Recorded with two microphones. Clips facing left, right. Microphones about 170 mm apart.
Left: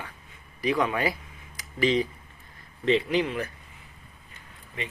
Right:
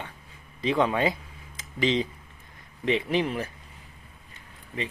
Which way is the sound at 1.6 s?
20° right (ahead or behind).